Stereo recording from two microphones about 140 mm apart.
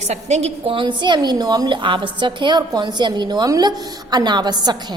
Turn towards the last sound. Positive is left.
turn(degrees=-30)  # may be behind; listen again after turning